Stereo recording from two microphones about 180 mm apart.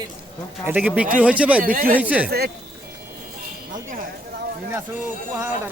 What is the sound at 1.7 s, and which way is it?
Speech, 50° right (ahead or behind).